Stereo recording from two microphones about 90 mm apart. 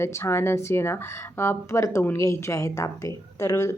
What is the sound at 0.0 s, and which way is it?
A woman's voice, 30° left (ahead or behind).